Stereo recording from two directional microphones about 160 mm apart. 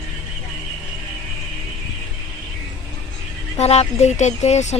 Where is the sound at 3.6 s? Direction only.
45° left (ahead or behind).